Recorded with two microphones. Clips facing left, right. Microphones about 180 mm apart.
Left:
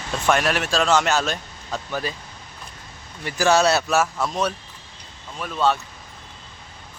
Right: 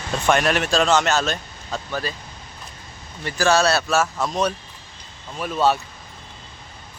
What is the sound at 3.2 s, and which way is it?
Speech, 15° left (ahead or behind).